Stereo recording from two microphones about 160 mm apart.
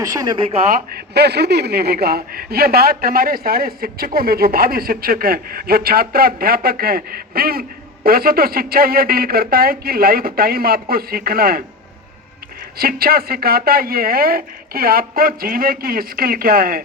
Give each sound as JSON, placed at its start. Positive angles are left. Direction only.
{"t": 0.0, "sound": "speech", "side_deg": -25}
{"t": 0.9, "sound": "speech", "side_deg": -90}
{"t": 12.7, "sound": "speech", "side_deg": -70}